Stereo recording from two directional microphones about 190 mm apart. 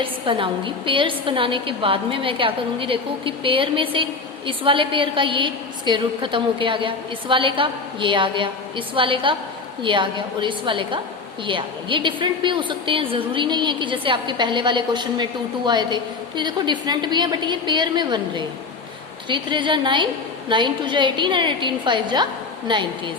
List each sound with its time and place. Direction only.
0.0 s a woman's voice: 25° right (ahead or behind)